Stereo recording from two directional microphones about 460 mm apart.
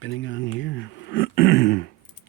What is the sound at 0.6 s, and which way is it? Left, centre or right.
Speech, left.